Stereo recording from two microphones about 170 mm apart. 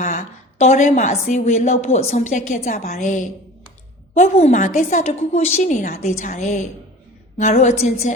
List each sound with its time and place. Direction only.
0.0 s a woman's voice: 45° left (ahead or behind)